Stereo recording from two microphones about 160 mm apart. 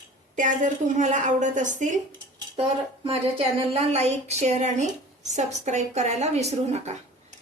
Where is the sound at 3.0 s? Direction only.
35° right (ahead or behind).